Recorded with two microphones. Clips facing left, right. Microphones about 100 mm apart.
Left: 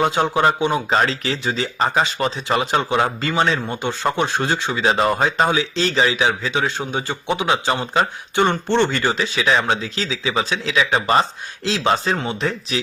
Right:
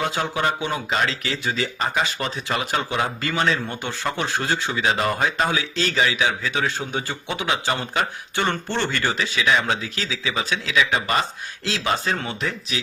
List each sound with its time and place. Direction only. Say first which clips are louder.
0.0 s speech: left 6 dB; 25° left (ahead or behind)